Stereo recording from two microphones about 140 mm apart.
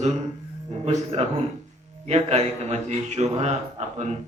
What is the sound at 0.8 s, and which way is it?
A man's voice, 55° right (ahead or behind).